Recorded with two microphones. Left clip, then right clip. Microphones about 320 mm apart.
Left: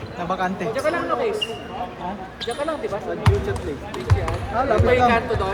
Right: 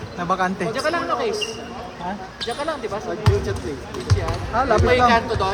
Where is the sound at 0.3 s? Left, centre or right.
Right.